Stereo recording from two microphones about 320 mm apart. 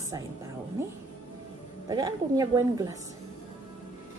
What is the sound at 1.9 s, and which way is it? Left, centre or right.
Speech, centre.